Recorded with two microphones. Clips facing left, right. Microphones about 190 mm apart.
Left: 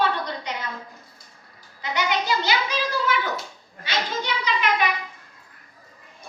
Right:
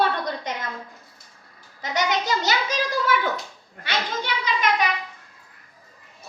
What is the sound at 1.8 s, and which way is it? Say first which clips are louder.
Child singing: right 1 dB; 45° right (ahead or behind).